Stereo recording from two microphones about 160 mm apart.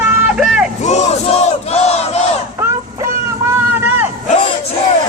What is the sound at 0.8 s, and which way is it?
Battle cry, 45° left (ahead or behind).